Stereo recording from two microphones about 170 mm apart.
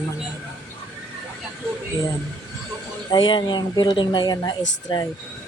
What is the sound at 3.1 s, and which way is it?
Speech, 25° left (ahead or behind).